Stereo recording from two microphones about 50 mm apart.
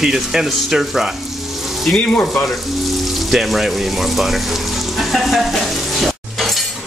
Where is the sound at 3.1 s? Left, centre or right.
Centre.